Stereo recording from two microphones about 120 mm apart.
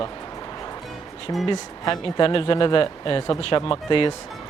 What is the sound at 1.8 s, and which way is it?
Speech, 35° left (ahead or behind).